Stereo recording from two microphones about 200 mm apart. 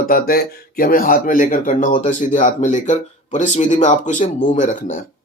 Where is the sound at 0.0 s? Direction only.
45° left (ahead or behind).